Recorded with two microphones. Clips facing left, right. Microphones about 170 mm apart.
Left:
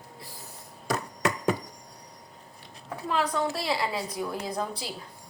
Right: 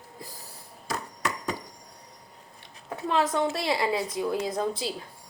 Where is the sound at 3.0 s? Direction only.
25° right (ahead or behind).